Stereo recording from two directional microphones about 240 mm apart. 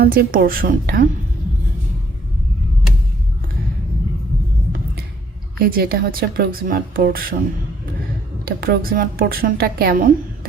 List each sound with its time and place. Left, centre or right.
0.0 s a woman's voice: right
5.5 s a woman's voice: right
8.4 s a woman's voice: right